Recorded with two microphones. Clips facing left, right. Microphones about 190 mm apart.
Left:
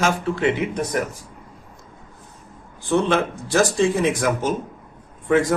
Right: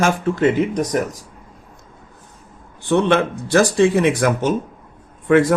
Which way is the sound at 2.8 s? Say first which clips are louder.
Right 3 dB; 65° right (ahead or behind).